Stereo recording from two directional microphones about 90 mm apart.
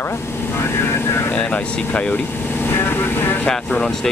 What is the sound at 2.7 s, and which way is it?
Speech, 25° left (ahead or behind).